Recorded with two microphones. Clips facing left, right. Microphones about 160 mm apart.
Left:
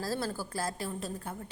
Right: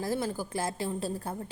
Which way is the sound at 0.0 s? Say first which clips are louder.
Right 3 dB; 20° right (ahead or behind).